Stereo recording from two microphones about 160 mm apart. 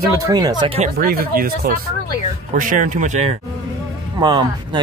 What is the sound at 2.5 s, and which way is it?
Speech, 55° right (ahead or behind).